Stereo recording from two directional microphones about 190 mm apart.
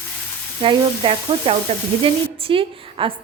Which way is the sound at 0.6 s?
30° right (ahead or behind).